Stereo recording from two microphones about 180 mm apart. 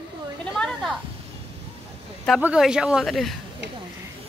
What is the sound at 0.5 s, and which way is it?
Speech, centre (ahead or behind).